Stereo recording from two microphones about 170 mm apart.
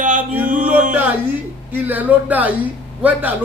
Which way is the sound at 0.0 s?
50° right (ahead or behind).